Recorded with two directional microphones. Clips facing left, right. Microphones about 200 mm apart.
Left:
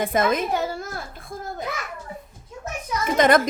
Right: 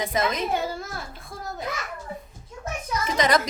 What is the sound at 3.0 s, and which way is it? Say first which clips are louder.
Music: left 5 dB; 55° left (ahead or behind).